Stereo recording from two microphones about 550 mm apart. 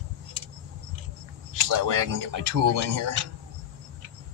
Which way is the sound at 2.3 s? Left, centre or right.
Right.